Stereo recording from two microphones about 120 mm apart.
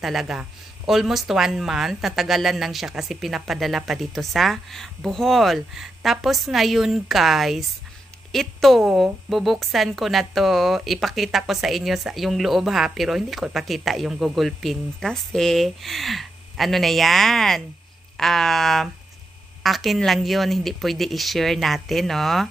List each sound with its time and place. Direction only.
0.0 s a woman's voice: centre (ahead or behind)